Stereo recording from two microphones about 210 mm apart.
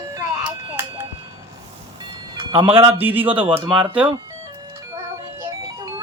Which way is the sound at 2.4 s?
25° right (ahead or behind).